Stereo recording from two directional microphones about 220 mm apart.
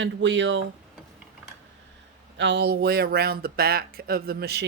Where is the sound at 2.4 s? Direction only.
50° right (ahead or behind).